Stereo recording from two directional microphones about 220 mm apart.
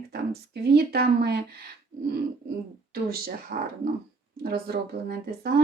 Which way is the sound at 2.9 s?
45° right (ahead or behind).